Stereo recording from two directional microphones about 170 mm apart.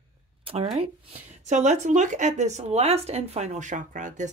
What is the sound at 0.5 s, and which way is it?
Speech, 35° right (ahead or behind).